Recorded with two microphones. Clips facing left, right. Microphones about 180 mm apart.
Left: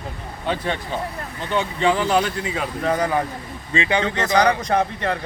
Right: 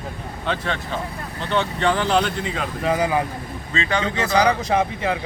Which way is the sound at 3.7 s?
15° left (ahead or behind).